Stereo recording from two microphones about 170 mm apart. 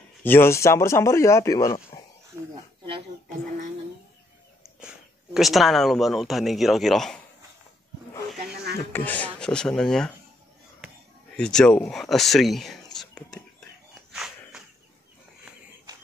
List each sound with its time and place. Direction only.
0.2 s speech: 15° left (ahead or behind)
1.7 s speech: 30° left (ahead or behind)
2.3 s speech: 20° right (ahead or behind)
4.6 s speech: 5° right (ahead or behind)
8.9 s speech: 10° left (ahead or behind)
11.3 s speech: 5° left (ahead or behind)
13.1 s whispering: 5° left (ahead or behind)
14.1 s a sound: 5° right (ahead or behind)